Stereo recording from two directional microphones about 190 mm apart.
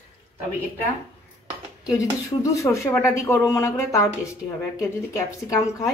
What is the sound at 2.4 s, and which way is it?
Speech, 15° left (ahead or behind).